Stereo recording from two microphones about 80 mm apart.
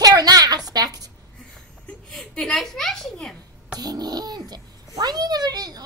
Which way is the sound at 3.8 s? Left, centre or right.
Right.